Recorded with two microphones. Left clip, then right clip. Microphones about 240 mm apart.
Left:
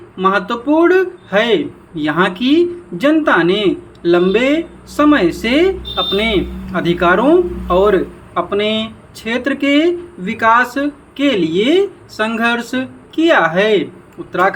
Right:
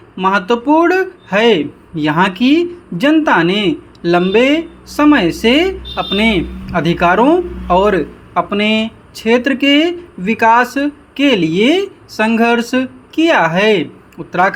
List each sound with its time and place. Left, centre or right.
0.2 s a man's voice: right